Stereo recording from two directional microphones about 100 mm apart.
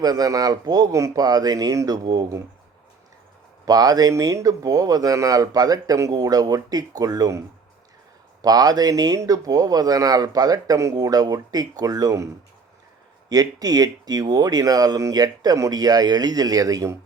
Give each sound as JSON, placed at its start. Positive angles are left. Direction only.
{"t": 0.0, "sound": "speech", "side_deg": -40}
{"t": 3.7, "sound": "speech", "side_deg": -40}